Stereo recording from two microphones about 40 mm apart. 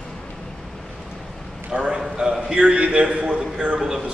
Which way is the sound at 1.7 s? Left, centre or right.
Right.